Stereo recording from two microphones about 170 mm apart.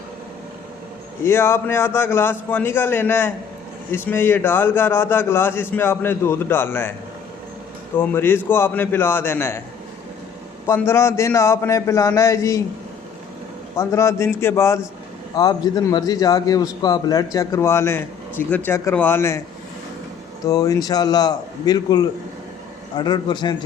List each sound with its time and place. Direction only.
1.2 s a man's voice: 15° left (ahead or behind)
7.9 s a man's voice: 15° left (ahead or behind)
10.7 s a man's voice: 15° left (ahead or behind)
13.7 s a man's voice: 15° left (ahead or behind)
20.4 s a man's voice: 20° left (ahead or behind)